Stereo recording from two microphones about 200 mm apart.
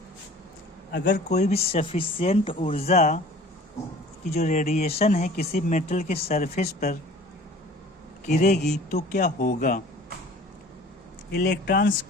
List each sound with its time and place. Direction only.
1.0 s speech: 35° left (ahead or behind)
4.3 s speech: 35° left (ahead or behind)
8.3 s speech: 40° left (ahead or behind)
11.3 s speech: 55° left (ahead or behind)